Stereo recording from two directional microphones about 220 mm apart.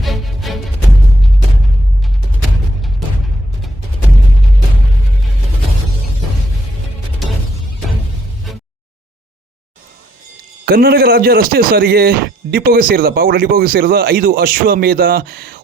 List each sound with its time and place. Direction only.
0.0 s music: centre (ahead or behind)
10.7 s speech: 45° right (ahead or behind)